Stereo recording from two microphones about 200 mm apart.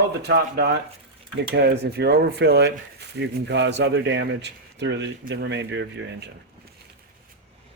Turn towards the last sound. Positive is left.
turn(degrees=-60)  # may be behind; listen again after turning